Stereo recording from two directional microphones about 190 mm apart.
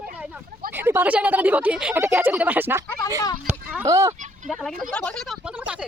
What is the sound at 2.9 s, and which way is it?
Speech, 20° left (ahead or behind).